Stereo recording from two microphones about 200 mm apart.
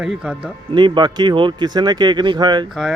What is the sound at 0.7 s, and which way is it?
Speech, 25° right (ahead or behind).